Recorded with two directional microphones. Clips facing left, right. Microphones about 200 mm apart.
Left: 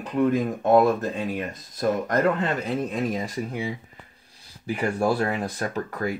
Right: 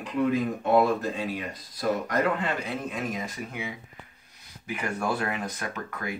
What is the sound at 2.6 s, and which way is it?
Speech, 35° left (ahead or behind).